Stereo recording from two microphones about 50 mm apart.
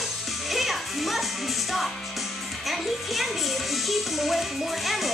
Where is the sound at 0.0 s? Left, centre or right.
Centre.